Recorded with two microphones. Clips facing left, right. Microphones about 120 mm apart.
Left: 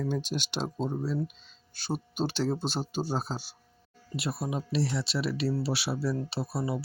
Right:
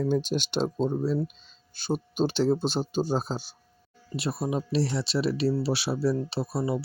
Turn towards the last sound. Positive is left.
turn(degrees=-20)  # may be behind; listen again after turning